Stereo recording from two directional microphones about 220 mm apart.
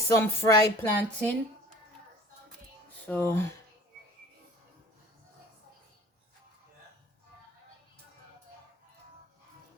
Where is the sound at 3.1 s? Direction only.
10° left (ahead or behind).